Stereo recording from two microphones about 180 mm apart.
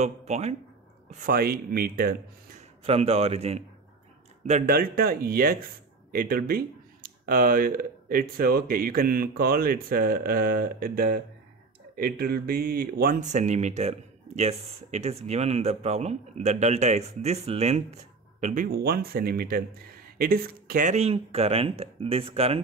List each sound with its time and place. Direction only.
0.0 s speech: 35° right (ahead or behind)
1.2 s speech: 60° right (ahead or behind)
2.8 s speech: 35° right (ahead or behind)
4.7 s speech: 55° right (ahead or behind)
18.7 s speech: 60° right (ahead or behind)
20.9 s speech: 35° right (ahead or behind)